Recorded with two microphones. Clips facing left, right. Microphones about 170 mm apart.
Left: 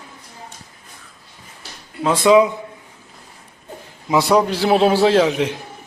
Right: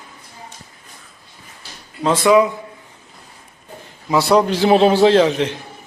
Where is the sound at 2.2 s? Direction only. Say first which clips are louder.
Left 1 dB; 20° left (ahead or behind).